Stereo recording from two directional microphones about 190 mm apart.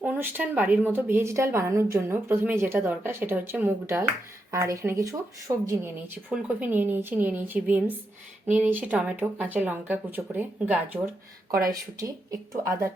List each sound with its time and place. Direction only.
0.0 s speech: 10° right (ahead or behind)